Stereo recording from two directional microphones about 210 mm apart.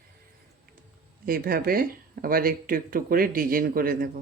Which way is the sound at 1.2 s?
45° right (ahead or behind).